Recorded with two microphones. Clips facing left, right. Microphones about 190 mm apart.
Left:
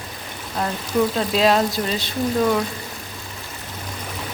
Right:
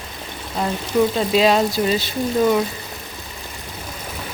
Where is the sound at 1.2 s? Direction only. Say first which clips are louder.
Right 2 dB; centre (ahead or behind).